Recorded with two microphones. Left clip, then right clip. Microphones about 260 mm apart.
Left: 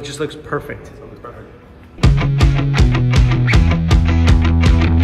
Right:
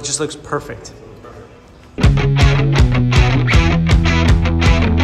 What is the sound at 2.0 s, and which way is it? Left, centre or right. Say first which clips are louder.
Music: right 2 dB; centre.